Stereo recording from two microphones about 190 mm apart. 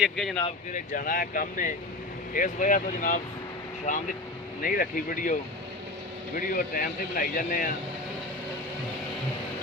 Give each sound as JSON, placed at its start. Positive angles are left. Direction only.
{"t": 0.0, "sound": "speech", "side_deg": 0}
{"t": 0.7, "sound": "speech", "side_deg": 45}